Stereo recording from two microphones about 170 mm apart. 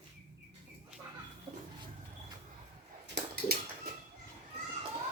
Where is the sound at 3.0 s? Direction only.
75° right (ahead or behind).